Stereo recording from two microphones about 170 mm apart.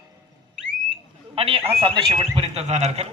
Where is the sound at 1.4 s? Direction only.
35° right (ahead or behind).